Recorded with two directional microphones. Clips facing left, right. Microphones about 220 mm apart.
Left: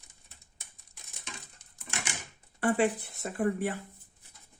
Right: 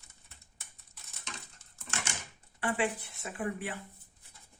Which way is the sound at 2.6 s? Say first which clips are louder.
Left 6 dB; 40° left (ahead or behind).